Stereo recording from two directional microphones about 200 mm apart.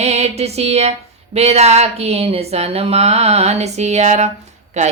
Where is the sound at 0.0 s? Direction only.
35° right (ahead or behind).